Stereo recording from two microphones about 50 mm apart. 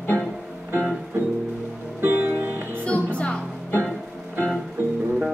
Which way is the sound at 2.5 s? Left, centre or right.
Right.